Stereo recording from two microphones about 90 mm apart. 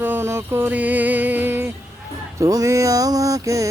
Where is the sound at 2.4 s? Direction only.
40° right (ahead or behind).